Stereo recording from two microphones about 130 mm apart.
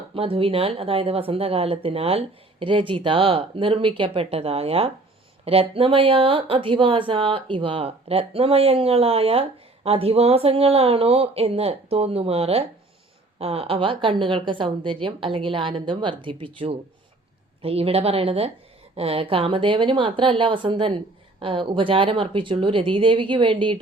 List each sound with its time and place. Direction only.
0.1 s speech: 45° right (ahead or behind)